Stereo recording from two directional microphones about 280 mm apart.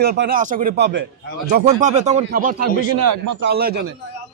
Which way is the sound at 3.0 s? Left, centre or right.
Right.